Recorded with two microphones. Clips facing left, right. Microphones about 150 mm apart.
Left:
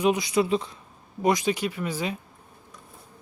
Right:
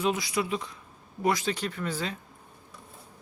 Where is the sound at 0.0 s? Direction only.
20° left (ahead or behind).